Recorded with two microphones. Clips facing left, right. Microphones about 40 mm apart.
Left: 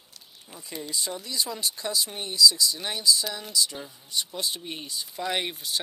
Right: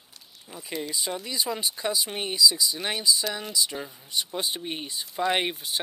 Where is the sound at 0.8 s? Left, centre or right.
Centre.